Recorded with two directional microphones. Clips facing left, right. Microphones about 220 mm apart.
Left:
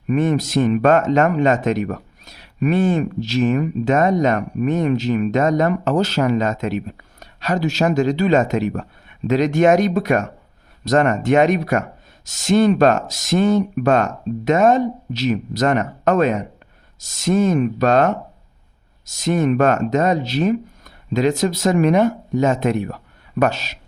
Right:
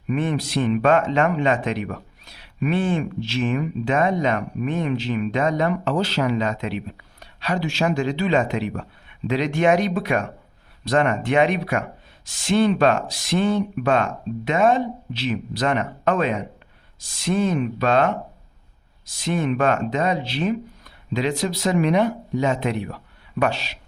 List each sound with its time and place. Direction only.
0.1 s speech: 45° left (ahead or behind)